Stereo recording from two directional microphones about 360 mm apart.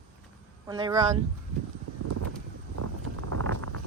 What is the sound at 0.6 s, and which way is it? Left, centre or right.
Speech, centre.